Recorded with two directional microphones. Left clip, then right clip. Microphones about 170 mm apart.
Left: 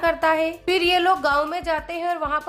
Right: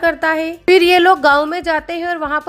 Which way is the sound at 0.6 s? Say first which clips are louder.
Right 10 dB; 35° right (ahead or behind).